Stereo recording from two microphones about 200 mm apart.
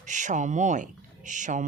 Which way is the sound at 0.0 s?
40° right (ahead or behind).